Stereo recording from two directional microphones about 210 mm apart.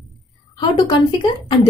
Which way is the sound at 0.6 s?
20° left (ahead or behind).